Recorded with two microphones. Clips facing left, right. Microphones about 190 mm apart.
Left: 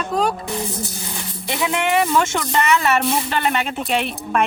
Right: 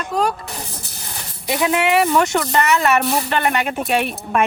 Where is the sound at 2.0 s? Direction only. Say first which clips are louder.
Right 2 dB; centre (ahead or behind).